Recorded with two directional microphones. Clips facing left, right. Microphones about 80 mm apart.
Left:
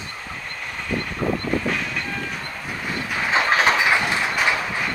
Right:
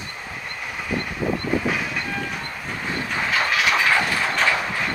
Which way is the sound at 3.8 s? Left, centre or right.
Centre.